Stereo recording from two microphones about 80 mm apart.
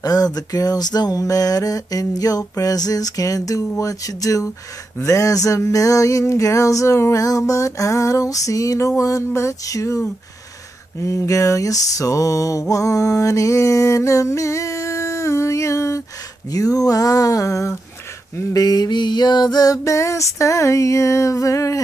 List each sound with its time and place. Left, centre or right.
0.0 s music: left
11.0 s mantra: left
16.5 s music: left
18.5 s music: left